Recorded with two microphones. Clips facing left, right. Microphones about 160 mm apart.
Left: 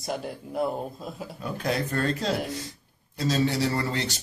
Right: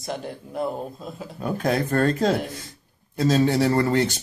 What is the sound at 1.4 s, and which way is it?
Speech, 50° right (ahead or behind).